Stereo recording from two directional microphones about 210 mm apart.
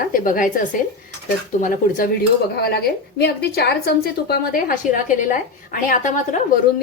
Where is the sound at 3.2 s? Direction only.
50° left (ahead or behind).